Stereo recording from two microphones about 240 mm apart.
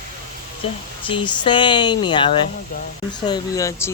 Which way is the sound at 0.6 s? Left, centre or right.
Left.